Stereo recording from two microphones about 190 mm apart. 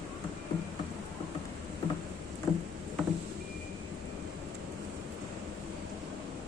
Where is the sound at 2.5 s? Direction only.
Centre (ahead or behind).